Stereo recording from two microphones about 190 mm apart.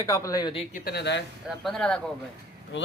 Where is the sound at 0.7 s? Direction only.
60° left (ahead or behind).